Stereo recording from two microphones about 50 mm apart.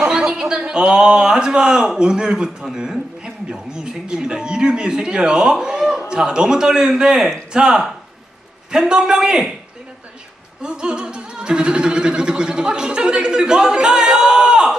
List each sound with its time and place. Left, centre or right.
0.1 s a man's voice: centre
10.6 s music: centre